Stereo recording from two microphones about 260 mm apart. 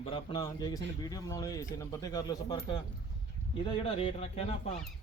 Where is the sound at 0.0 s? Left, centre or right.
Left.